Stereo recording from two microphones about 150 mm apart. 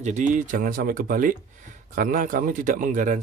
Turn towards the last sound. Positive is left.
turn(degrees=-60)  # may be behind; listen again after turning